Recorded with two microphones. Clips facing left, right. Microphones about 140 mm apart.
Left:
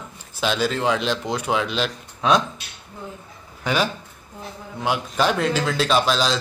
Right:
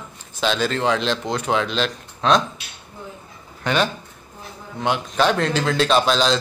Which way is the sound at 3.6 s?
5° left (ahead or behind).